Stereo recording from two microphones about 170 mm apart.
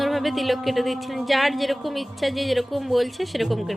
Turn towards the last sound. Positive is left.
turn(degrees=0)  # may be behind; listen again after turning